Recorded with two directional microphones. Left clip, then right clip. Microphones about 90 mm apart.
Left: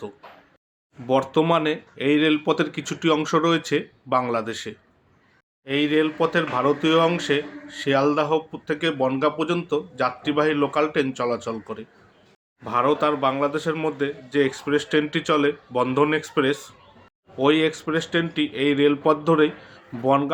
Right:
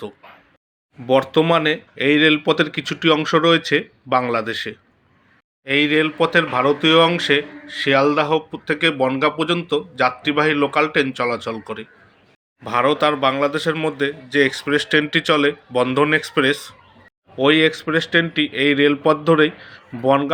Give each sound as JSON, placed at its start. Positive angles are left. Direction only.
{"t": 1.0, "sound": "speech", "side_deg": -15}